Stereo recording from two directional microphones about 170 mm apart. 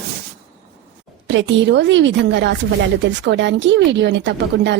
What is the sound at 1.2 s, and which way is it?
Speech, 90° right.